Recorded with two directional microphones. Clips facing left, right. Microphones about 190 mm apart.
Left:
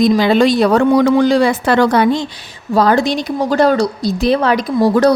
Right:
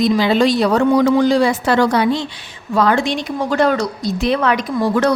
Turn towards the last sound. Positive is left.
turn(degrees=40)  # may be behind; listen again after turning